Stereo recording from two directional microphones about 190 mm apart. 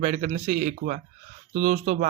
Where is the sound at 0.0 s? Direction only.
40° right (ahead or behind).